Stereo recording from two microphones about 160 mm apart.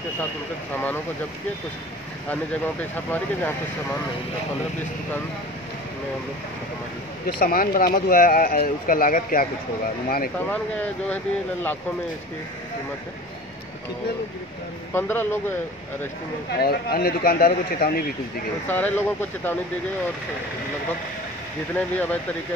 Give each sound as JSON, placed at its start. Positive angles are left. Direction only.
{"t": 2.8, "sound": "speech", "side_deg": 10}
{"t": 7.3, "sound": "speech", "side_deg": 65}
{"t": 10.5, "sound": "speech", "side_deg": 10}
{"t": 15.0, "sound": "speech", "side_deg": 15}
{"t": 16.5, "sound": "speech", "side_deg": 75}
{"t": 18.7, "sound": "speech", "side_deg": 10}
{"t": 21.7, "sound": "speech", "side_deg": 10}